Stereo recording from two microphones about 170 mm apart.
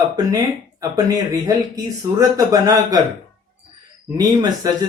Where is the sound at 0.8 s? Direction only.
20° right (ahead or behind).